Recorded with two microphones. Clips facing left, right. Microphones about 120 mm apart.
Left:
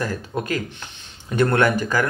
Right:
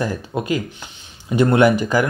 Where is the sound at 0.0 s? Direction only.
15° right (ahead or behind).